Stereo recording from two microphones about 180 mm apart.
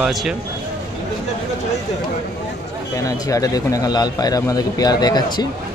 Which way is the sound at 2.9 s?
20° left (ahead or behind).